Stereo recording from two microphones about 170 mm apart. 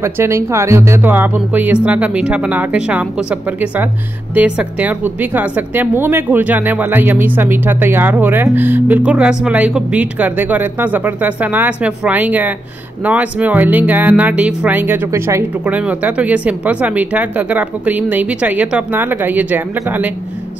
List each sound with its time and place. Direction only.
0.0 s a woman's voice: 15° right (ahead or behind)